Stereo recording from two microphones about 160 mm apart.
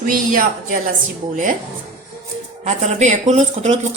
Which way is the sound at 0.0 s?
60° right (ahead or behind).